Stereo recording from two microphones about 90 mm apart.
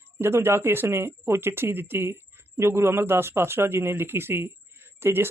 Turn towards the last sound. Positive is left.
turn(degrees=-25)  # may be behind; listen again after turning